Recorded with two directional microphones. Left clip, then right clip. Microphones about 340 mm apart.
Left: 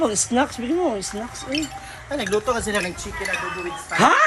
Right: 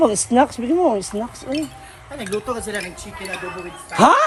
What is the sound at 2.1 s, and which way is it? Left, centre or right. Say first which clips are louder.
Speech: left 3 dB; left.